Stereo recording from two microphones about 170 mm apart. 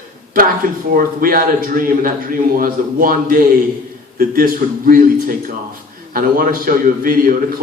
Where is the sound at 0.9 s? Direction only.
55° right (ahead or behind).